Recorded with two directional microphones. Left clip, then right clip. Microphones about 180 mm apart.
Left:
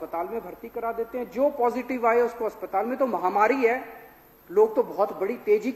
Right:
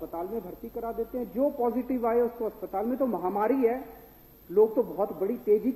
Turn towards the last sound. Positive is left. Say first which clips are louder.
# left 2 dB
turn(degrees=15)  # may be behind; listen again after turning